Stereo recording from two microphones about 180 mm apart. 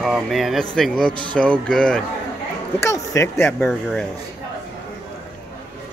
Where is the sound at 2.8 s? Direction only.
15° left (ahead or behind).